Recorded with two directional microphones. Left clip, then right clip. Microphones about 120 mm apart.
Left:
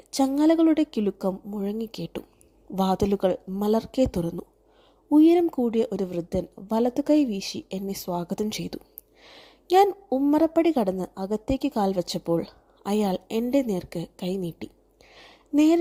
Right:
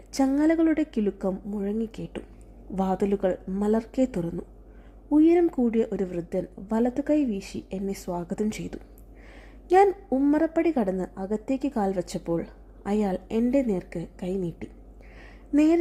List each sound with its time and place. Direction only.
0.1 s a woman's voice: 30° left (ahead or behind)
9.2 s a sound: 35° left (ahead or behind)
10.1 s a woman's voice: 30° left (ahead or behind)